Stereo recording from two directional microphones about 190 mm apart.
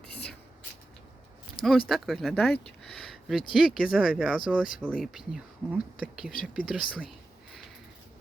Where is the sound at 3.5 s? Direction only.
Centre (ahead or behind).